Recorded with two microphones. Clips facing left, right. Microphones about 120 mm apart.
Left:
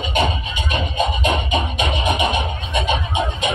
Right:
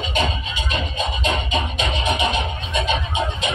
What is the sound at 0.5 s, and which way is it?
Music, 55° left (ahead or behind).